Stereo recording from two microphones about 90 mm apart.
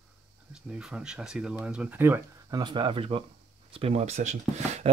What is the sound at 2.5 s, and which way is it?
Speech, 55° right (ahead or behind).